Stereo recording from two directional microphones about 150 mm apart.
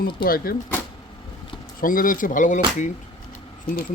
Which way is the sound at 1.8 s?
65° left (ahead or behind).